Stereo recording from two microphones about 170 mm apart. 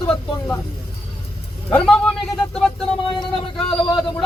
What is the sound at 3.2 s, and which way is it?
Speech, 30° left (ahead or behind).